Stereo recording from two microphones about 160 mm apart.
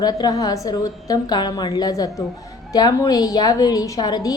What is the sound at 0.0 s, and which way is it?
A woman's voice, 25° left (ahead or behind).